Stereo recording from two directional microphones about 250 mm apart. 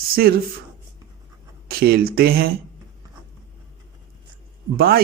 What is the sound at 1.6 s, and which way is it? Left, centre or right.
Speech, right.